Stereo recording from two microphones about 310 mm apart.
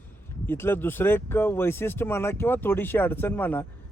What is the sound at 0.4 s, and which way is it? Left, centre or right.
A man's voice, centre.